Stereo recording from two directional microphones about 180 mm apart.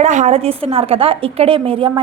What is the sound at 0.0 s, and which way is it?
A woman's voice, 40° right (ahead or behind).